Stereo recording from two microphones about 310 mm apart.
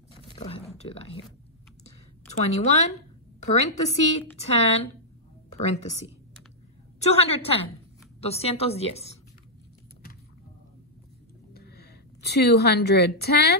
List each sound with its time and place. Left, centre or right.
0.1 s a sound: centre
0.7 s speech: centre
2.2 s a woman's voice: left
11.5 s a woman's voice: left